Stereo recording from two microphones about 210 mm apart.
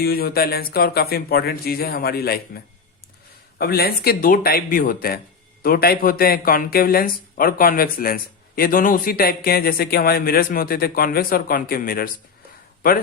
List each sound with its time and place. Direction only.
0.0 s speech: 45° left (ahead or behind)
3.6 s speech: 45° left (ahead or behind)